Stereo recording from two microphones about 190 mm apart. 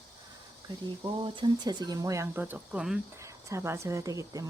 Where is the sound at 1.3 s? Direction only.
25° right (ahead or behind); by 3.0 s 5° right (ahead or behind).